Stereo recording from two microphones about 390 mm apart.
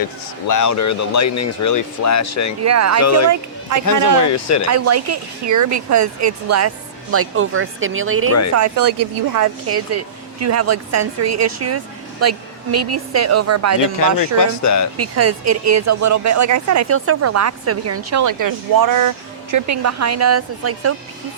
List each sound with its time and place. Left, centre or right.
0.4 s speech: left
2.6 s speech: right
3.0 s speech: left
3.2 s speech: right
4.3 s speech: left
4.7 s speech: right
8.3 s speech: left
8.5 s speech: right
9.6 s speech: right
14.2 s speech: left
14.9 s speech: right